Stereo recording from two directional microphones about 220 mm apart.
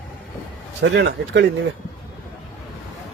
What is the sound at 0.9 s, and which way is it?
Speech, 50° right (ahead or behind).